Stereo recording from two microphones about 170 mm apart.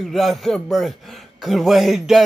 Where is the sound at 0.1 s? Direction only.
Centre (ahead or behind).